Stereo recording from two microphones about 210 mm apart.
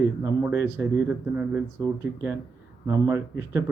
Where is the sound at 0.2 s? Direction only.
15° right (ahead or behind).